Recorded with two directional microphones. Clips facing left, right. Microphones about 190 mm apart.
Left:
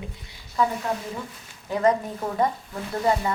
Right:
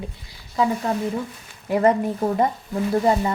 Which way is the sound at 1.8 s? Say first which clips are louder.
Right 3 dB; 30° right (ahead or behind).